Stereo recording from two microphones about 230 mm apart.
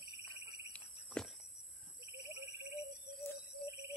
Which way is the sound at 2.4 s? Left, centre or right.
Right.